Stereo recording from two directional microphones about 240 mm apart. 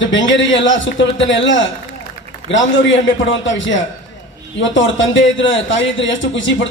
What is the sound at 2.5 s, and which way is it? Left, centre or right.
A man's voice, left.